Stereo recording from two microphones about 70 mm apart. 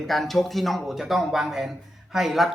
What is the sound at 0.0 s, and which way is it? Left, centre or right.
A man's voice, centre.